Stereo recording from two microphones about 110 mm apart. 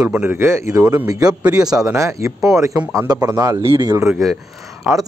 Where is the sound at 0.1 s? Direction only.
15° right (ahead or behind).